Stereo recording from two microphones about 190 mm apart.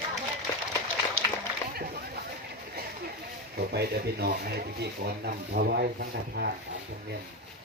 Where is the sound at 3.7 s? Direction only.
55° right (ahead or behind).